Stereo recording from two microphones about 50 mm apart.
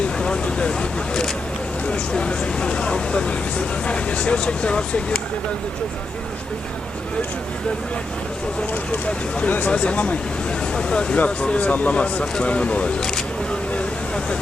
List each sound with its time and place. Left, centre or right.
0.2 s speech: centre
8.7 s speech: left